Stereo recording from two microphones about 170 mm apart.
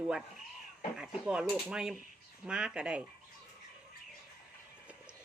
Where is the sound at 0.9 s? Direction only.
5° right (ahead or behind).